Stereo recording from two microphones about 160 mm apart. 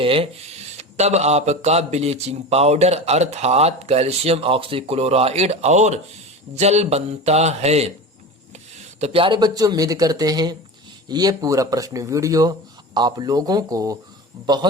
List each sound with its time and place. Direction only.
0.0 s speech: 35° right (ahead or behind)
6.6 s mantra: 45° right (ahead or behind)
9.0 s speech: 40° right (ahead or behind)